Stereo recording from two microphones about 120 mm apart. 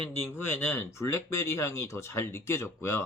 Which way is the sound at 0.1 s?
20° left (ahead or behind).